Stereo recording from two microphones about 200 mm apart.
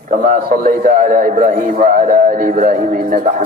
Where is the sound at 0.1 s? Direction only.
40° right (ahead or behind).